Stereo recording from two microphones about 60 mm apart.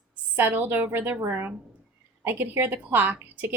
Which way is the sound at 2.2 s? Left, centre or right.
Right.